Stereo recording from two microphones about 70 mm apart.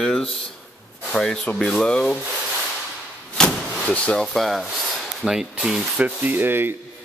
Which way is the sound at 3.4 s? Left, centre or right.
Centre.